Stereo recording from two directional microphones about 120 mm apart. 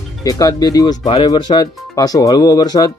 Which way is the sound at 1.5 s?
35° left (ahead or behind).